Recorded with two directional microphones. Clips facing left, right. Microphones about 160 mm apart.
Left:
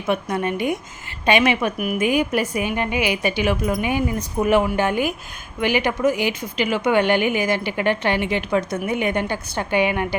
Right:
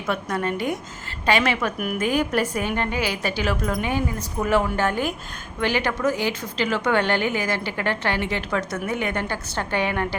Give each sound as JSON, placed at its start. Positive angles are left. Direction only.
{"t": 0.0, "sound": "a woman's voice", "side_deg": 15}